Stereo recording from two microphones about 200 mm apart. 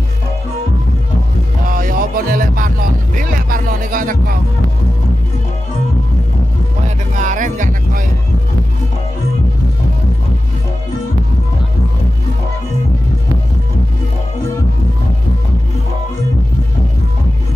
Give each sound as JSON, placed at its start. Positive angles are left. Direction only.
{"t": 1.7, "sound": "music", "side_deg": -45}
{"t": 7.2, "sound": "music", "side_deg": -40}